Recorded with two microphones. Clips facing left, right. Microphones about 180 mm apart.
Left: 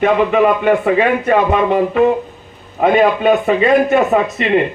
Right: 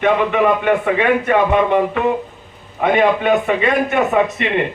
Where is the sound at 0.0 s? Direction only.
40° left (ahead or behind).